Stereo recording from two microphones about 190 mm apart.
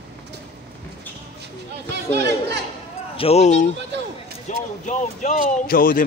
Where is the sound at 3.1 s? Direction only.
35° left (ahead or behind); by 6.0 s 50° left (ahead or behind).